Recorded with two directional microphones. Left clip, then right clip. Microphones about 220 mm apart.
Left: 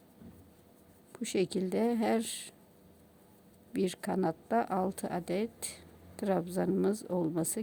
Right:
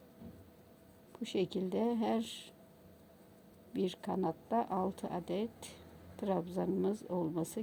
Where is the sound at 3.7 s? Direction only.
20° left (ahead or behind).